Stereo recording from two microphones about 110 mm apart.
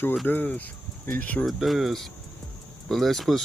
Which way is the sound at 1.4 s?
Centre (ahead or behind).